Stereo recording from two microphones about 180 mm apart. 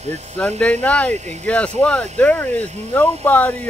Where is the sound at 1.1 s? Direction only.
40° right (ahead or behind).